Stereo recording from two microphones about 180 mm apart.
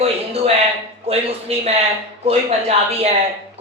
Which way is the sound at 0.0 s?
35° right (ahead or behind).